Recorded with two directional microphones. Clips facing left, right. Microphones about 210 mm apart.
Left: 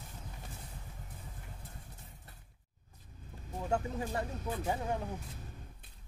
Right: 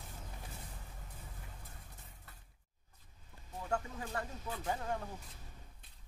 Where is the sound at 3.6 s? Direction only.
20° left (ahead or behind).